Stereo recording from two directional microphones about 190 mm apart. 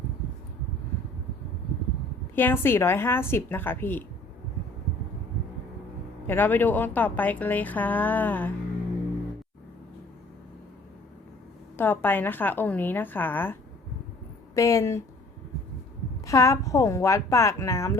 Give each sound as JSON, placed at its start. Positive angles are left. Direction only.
{"t": 2.3, "sound": "a woman's voice", "side_deg": 10}
{"t": 6.2, "sound": "a woman's voice", "side_deg": 10}
{"t": 11.8, "sound": "a woman's voice", "side_deg": 10}
{"t": 16.2, "sound": "a woman's voice", "side_deg": 15}